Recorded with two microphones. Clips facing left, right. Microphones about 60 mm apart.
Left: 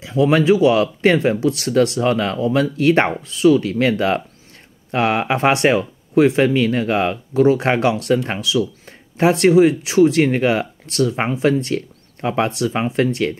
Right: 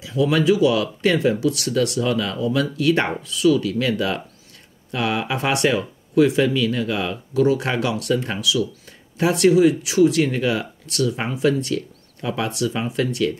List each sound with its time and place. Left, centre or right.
0.0 s speech: left